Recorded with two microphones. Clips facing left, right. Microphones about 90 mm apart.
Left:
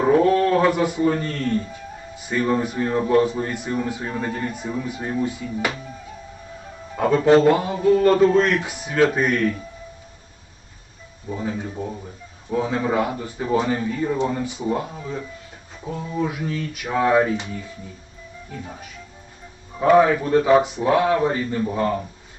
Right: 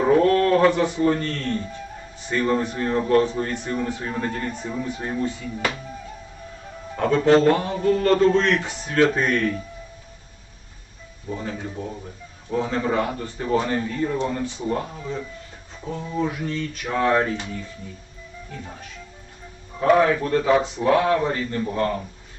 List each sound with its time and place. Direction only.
0.0 s a man's voice: 10° left (ahead or behind)
6.9 s a man's voice: 5° left (ahead or behind)
11.3 s a man's voice: 5° left (ahead or behind)
18.5 s a man's voice: 5° left (ahead or behind)